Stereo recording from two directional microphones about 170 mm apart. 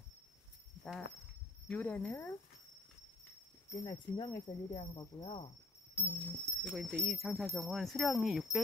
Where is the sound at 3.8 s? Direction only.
25° left (ahead or behind).